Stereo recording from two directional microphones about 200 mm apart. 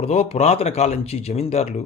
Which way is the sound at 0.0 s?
30° left (ahead or behind).